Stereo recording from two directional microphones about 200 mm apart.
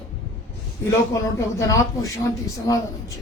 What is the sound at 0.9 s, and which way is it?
A man's voice, 15° left (ahead or behind).